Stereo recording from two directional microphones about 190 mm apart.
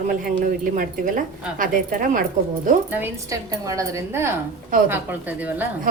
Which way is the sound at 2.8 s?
10° right (ahead or behind).